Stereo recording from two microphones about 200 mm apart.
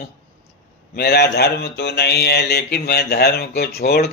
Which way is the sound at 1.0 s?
55° left (ahead or behind).